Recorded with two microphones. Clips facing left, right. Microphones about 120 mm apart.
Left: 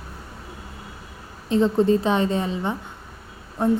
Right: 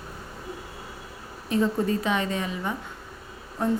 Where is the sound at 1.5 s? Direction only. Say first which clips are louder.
Left 6 dB; 25° left (ahead or behind).